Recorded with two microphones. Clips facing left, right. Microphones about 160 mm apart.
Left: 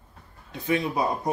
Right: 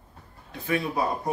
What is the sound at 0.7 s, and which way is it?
Speech, 20° left (ahead or behind).